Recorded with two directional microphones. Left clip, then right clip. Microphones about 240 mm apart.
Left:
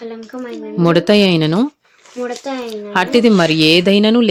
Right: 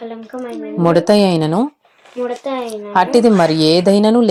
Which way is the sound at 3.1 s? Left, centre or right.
Centre.